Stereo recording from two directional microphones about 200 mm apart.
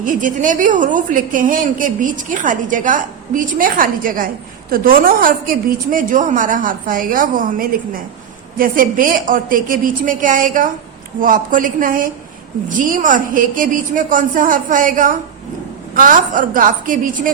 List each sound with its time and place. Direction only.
0.0 s a woman's voice: 40° right (ahead or behind)